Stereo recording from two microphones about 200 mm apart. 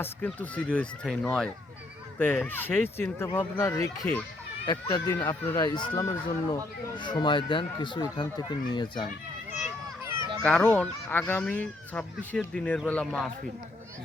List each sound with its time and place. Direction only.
0.0 s speech: 10° left (ahead or behind)
10.4 s speech: 5° left (ahead or behind)